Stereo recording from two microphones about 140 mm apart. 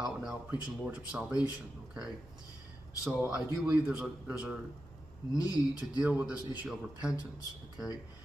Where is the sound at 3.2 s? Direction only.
5° right (ahead or behind).